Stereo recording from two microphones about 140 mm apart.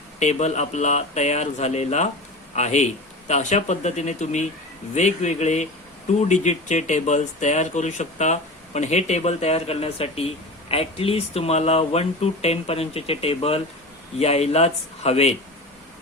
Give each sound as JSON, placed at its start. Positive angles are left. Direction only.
{"t": 0.2, "sound": "speech", "side_deg": 55}